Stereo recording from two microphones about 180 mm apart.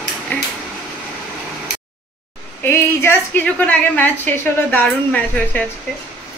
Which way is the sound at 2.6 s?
10° left (ahead or behind).